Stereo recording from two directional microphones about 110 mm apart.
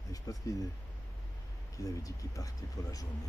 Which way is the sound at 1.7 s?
30° left (ahead or behind).